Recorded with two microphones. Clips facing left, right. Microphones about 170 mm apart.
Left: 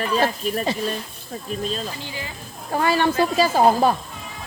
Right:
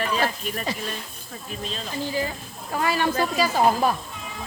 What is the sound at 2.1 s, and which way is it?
Speech, 40° right (ahead or behind).